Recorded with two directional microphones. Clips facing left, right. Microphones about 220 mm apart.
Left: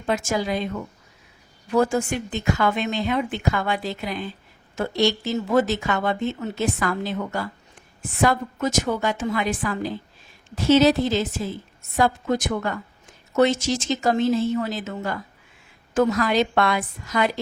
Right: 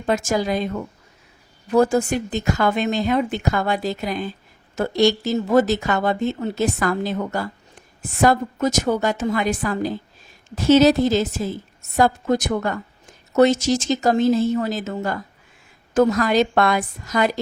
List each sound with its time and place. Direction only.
0.0 s a woman's voice: 40° right (ahead or behind)